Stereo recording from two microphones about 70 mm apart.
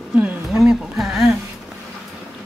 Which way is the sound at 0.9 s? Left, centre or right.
Centre.